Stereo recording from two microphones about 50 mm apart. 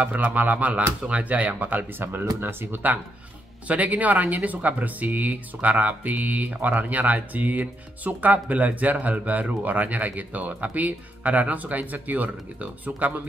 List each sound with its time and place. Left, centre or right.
0.0 s speech: right
3.6 s speech: right